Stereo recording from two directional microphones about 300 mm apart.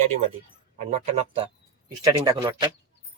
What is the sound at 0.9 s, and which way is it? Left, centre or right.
Speech, right.